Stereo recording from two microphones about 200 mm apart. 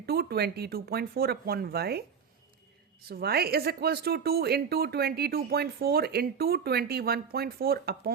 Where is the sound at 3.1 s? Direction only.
50° right (ahead or behind).